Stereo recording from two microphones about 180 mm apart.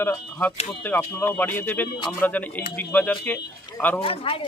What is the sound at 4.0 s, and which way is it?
Speech, 30° left (ahead or behind).